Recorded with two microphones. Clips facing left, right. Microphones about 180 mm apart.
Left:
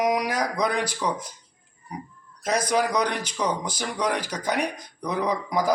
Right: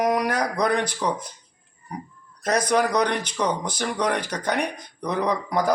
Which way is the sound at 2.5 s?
60° right (ahead or behind).